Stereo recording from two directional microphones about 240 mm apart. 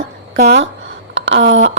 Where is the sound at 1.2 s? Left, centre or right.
Right.